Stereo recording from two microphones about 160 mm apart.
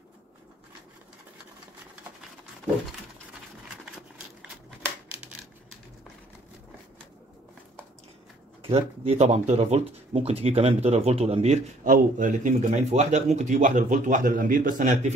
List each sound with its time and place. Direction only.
8.6 s speech: 35° right (ahead or behind)
11.8 s speech: 55° right (ahead or behind)